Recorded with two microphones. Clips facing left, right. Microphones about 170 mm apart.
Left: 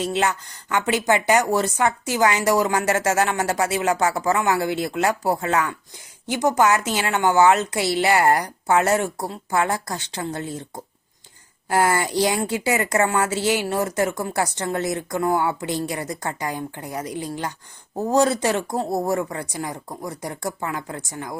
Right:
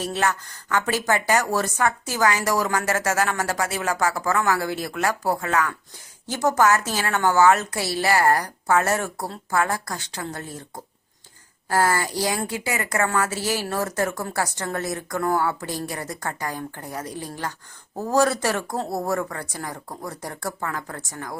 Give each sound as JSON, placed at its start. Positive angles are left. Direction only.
{"t": 0.0, "sound": "a woman's voice", "side_deg": 20}
{"t": 11.7, "sound": "a woman's voice", "side_deg": 20}